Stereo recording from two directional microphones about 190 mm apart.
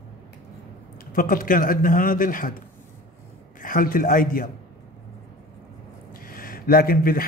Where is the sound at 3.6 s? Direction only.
45° left (ahead or behind).